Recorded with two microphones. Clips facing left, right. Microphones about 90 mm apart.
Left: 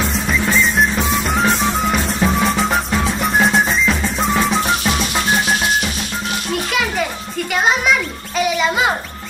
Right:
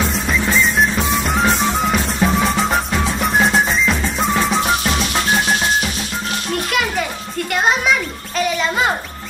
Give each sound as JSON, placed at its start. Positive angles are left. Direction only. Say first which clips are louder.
{"t": 0.3, "sound": "music", "louder": "left 1 dB", "side_deg": 0}
{"t": 6.7, "sound": "music", "louder": "even", "side_deg": 0}